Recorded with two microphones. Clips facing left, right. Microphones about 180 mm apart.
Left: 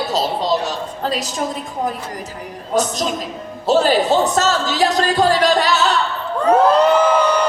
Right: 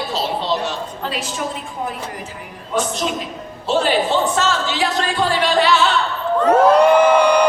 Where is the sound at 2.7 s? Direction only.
40° left (ahead or behind).